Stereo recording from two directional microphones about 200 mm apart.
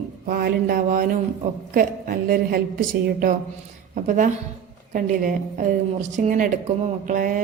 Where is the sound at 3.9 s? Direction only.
40° right (ahead or behind).